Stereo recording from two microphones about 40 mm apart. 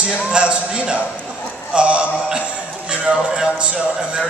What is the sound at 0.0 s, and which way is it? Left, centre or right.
A man's voice, right.